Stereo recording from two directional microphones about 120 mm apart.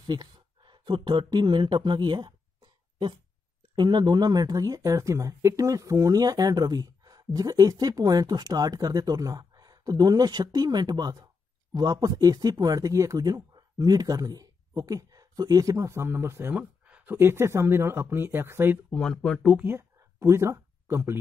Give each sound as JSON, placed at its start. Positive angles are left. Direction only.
{"t": 0.0, "sound": "speech", "side_deg": -35}
{"t": 3.7, "sound": "speech", "side_deg": -40}
{"t": 18.9, "sound": "speech", "side_deg": 5}
{"t": 19.6, "sound": "speech", "side_deg": -20}